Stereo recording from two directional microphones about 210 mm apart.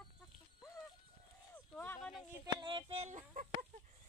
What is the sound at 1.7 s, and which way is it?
Speech, 10° left (ahead or behind).